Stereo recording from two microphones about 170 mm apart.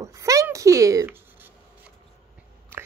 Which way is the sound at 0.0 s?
20° right (ahead or behind).